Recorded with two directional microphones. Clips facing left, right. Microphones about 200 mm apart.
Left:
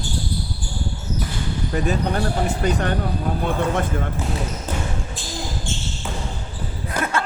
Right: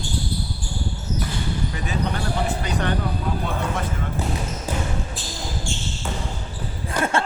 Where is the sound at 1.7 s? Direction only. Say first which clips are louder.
Left 5 dB; 45° left (ahead or behind).